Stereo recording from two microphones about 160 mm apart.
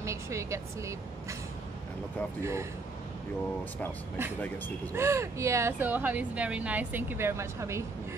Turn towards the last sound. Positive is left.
turn(degrees=-15)  # may be behind; listen again after turning